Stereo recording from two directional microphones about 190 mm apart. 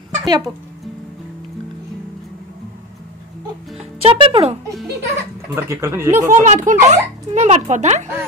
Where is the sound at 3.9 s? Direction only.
30° right (ahead or behind).